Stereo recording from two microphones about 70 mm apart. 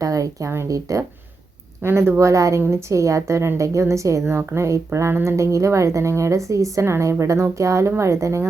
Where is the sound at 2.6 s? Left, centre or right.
Right.